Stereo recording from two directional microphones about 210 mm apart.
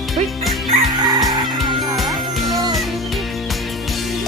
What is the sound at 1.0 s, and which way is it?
Chicken, 20° right (ahead or behind).